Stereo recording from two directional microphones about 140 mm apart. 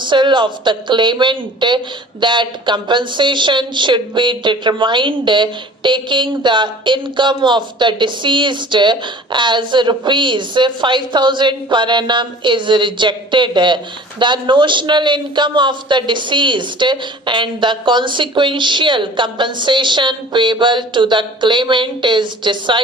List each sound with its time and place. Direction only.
0.0 s speech: 35° right (ahead or behind)